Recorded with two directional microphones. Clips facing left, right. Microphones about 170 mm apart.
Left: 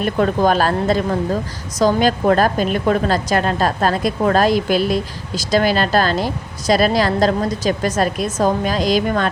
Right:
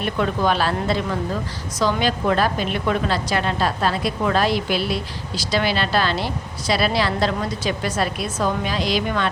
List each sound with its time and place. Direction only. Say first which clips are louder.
0.0 s a woman's voice: left 5 dB; 45° left (ahead or behind)